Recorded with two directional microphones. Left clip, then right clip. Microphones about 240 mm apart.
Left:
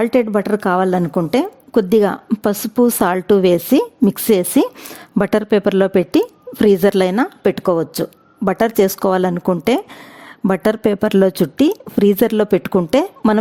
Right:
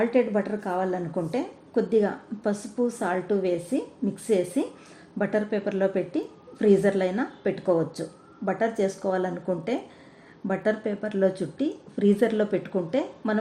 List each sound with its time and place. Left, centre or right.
0.0 s speech: left